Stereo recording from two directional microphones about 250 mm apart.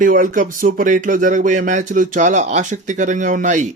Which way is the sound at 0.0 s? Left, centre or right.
Right.